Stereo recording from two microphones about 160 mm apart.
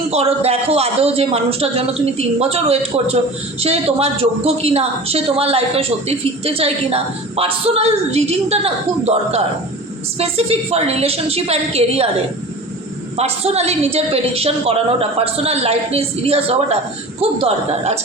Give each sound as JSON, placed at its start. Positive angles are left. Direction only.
{"t": 0.1, "sound": "a woman's voice", "side_deg": -40}
{"t": 13.1, "sound": "a woman's voice", "side_deg": -40}